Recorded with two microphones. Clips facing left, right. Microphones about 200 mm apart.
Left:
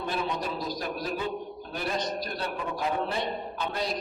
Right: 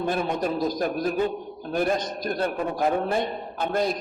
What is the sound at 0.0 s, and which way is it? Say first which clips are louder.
A man's voice: right 6 dB; 50° right (ahead or behind).